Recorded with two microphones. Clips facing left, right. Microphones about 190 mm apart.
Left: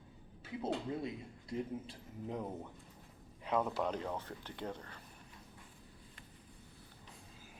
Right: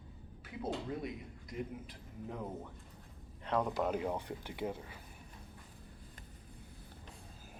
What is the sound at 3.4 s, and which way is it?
Speech, 5° left (ahead or behind).